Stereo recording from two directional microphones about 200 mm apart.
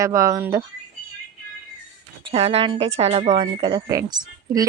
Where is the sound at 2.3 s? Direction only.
30° right (ahead or behind).